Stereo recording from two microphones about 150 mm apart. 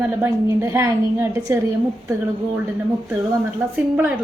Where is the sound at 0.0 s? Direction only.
15° right (ahead or behind).